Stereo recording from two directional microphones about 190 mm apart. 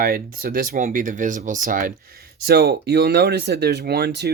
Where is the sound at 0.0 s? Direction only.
50° right (ahead or behind).